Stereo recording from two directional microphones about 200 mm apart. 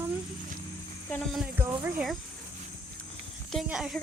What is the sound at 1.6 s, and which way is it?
Speech, 10° right (ahead or behind).